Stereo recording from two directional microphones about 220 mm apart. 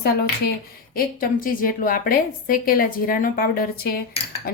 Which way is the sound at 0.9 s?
40° left (ahead or behind).